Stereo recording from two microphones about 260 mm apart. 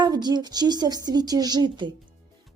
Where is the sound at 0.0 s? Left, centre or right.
Centre.